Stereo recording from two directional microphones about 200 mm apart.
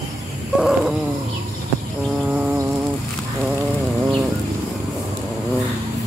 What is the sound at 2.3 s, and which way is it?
Insect, 5° right (ahead or behind).